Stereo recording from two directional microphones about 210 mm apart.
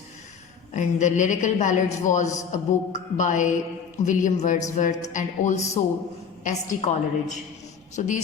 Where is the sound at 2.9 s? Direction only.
35° left (ahead or behind).